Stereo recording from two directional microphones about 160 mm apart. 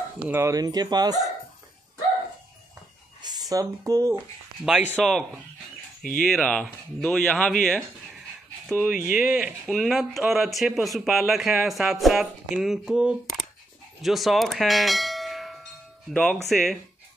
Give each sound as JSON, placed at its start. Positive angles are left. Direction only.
{"t": 0.2, "sound": "speech", "side_deg": -15}
{"t": 3.2, "sound": "speech", "side_deg": -25}
{"t": 4.6, "sound": "speech", "side_deg": -5}
{"t": 6.2, "sound": "speech", "side_deg": 0}
{"t": 9.1, "sound": "speech", "side_deg": -5}
{"t": 14.0, "sound": "clang", "side_deg": 0}
{"t": 16.1, "sound": "speech", "side_deg": 5}